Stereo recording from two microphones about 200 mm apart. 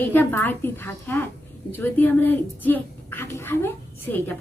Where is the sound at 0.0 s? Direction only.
10° left (ahead or behind).